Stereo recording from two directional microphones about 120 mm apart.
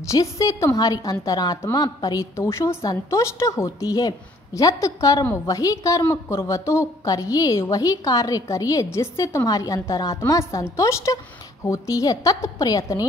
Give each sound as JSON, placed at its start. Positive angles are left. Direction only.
{"t": 0.1, "sound": "a woman's voice", "side_deg": 25}